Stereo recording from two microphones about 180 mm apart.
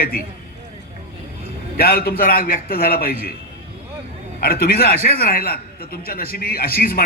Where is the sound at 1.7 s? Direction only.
60° left (ahead or behind).